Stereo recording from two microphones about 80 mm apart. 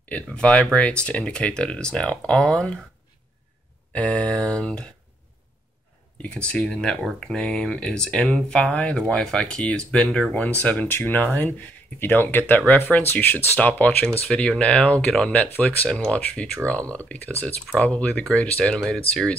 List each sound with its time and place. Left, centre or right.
0.1 s speech: centre
3.9 s speech: centre
6.2 s speech: centre
7.0 s speech: centre
7.2 s speech: centre